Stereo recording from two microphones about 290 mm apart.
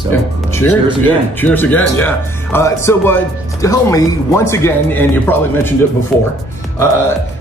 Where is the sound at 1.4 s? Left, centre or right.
Centre.